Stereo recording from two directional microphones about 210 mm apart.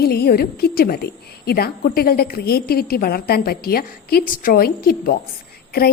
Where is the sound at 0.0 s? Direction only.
50° left (ahead or behind).